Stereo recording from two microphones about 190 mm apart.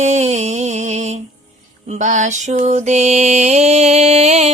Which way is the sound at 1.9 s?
40° right (ahead or behind).